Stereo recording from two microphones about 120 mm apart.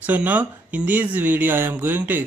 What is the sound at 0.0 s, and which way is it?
Speech, 15° right (ahead or behind).